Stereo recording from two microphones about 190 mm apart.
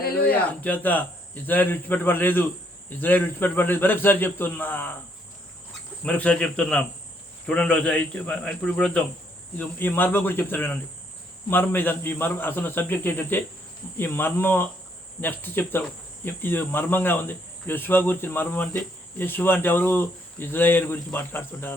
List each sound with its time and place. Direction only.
0.0 s a sound: 55° left (ahead or behind)
0.4 s cricket: 10° left (ahead or behind)
6.0 s cricket: 5° left (ahead or behind)
7.4 s a man's voice: 5° left (ahead or behind)
9.6 s cricket: 10° left (ahead or behind)